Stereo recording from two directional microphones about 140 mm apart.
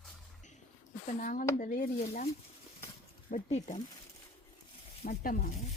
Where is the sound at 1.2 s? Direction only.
70° left (ahead or behind).